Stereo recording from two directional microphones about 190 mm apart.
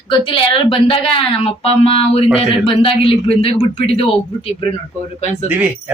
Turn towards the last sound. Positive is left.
turn(degrees=-10)  # may be behind; listen again after turning